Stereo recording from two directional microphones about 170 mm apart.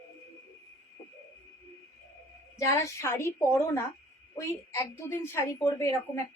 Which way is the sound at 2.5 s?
20° left (ahead or behind).